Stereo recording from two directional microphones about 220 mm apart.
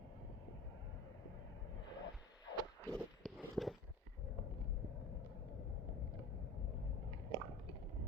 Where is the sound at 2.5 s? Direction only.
15° left (ahead or behind).